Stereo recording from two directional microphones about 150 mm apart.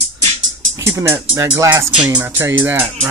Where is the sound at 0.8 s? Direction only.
20° right (ahead or behind).